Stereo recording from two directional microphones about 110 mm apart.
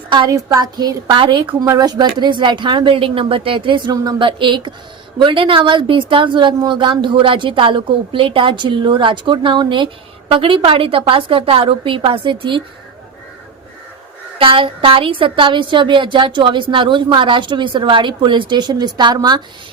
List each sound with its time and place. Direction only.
0.1 s a woman's voice: 35° right (ahead or behind)
1.6 s speech: 35° right (ahead or behind)
14.3 s speech: 55° right (ahead or behind)